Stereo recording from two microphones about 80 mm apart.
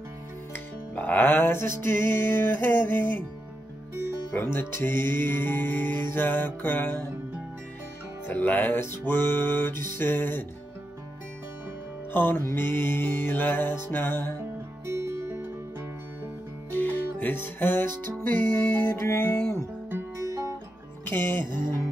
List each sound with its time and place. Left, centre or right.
0.5 s music: left
4.3 s music: left
8.3 s music: left
12.1 s music: left
14.9 s music: right
16.8 s music: left
21.0 s music: left